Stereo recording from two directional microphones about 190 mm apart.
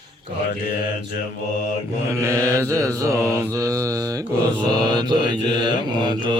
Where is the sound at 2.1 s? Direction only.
15° right (ahead or behind).